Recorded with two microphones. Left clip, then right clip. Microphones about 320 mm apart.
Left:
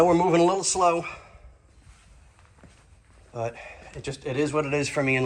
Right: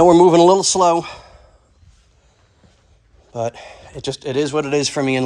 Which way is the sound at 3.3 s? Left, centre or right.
Centre.